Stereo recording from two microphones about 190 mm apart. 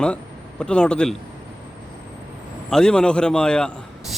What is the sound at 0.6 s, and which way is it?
Speech, 5° left (ahead or behind).